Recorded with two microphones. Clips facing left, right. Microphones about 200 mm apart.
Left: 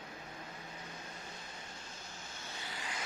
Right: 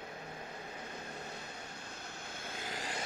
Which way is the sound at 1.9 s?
60° right (ahead or behind).